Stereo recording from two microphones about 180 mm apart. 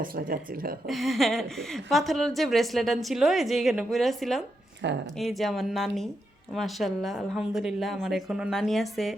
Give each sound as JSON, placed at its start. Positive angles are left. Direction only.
{"t": 0.0, "sound": "speech", "side_deg": -55}
{"t": 0.9, "sound": "a woman's voice", "side_deg": 0}